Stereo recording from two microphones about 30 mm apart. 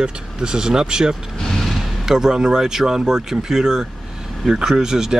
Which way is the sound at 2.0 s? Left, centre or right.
Centre.